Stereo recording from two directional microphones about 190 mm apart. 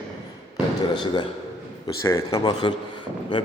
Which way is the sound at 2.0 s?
15° left (ahead or behind).